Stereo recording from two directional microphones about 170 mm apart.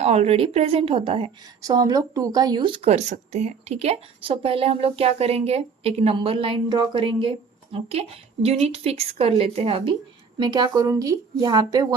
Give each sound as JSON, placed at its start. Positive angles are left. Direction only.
{"t": 0.0, "sound": "speech", "side_deg": -40}
{"t": 1.6, "sound": "speech", "side_deg": -20}